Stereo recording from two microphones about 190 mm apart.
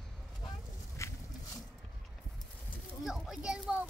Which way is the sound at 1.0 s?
15° left (ahead or behind).